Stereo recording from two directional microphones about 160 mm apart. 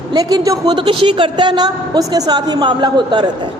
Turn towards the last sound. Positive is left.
turn(degrees=-30)  # may be behind; listen again after turning